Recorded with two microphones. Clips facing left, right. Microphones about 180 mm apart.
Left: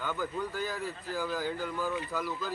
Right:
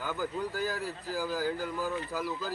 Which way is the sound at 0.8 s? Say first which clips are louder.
Even; 35° right (ahead or behind).